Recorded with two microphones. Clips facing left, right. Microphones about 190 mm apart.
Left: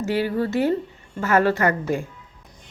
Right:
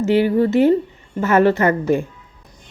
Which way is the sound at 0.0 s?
20° right (ahead or behind).